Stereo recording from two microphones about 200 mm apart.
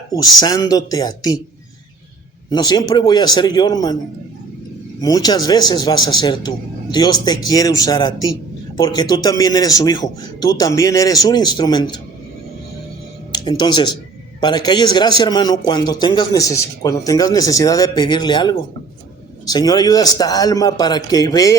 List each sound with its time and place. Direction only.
0.1 s a man's voice: 20° left (ahead or behind)
2.5 s a man's voice: 20° left (ahead or behind)
4.9 s a man's voice: 20° left (ahead or behind)
13.3 s a man's voice: 20° left (ahead or behind)